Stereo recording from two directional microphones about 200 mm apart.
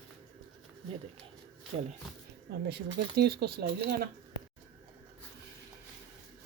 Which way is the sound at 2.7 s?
55° right (ahead or behind).